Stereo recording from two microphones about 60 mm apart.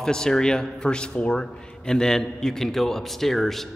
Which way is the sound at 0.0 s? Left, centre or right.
Centre.